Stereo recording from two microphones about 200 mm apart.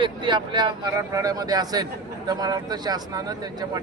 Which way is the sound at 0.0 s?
25° right (ahead or behind).